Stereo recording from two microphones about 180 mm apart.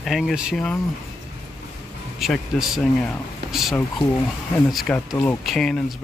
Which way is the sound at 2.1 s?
Centre (ahead or behind).